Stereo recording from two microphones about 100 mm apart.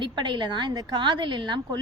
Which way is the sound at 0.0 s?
50° right (ahead or behind).